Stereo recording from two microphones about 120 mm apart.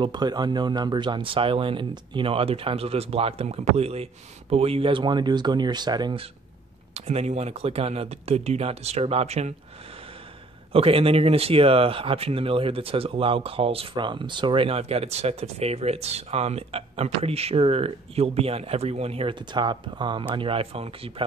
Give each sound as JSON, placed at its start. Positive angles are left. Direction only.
{"t": 0.0, "sound": "speech", "side_deg": -35}
{"t": 6.9, "sound": "speech", "side_deg": -60}
{"t": 10.7, "sound": "speech", "side_deg": -50}
{"t": 19.3, "sound": "speech", "side_deg": -40}